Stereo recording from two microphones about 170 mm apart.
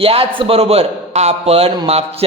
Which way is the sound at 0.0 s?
35° right (ahead or behind).